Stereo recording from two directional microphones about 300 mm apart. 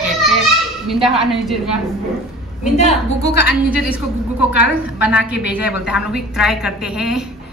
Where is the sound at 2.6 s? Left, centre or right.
Left.